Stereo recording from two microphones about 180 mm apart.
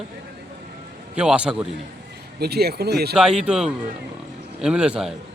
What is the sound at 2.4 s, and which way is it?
Speech, 60° right (ahead or behind).